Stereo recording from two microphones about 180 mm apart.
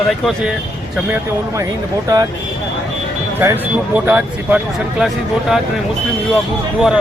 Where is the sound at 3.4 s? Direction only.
10° right (ahead or behind).